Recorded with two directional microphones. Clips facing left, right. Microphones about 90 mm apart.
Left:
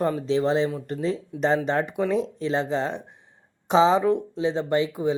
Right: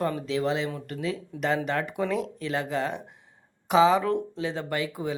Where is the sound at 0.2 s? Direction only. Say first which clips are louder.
Left 5 dB; 30° left (ahead or behind).